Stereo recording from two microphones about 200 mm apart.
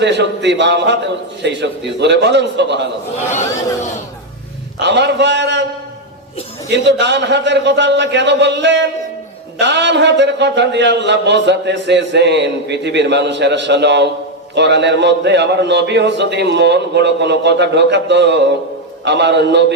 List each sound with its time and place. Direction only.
0.0 s a man's voice: 60° right (ahead or behind)
4.8 s a man's voice: 60° right (ahead or behind)
7.0 s a man's voice: 60° right (ahead or behind)